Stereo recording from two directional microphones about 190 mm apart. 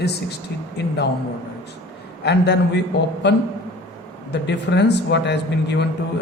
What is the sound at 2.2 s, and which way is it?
Speech, 65° left (ahead or behind).